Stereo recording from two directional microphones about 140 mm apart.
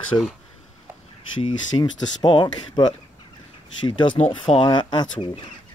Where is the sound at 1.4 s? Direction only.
35° left (ahead or behind).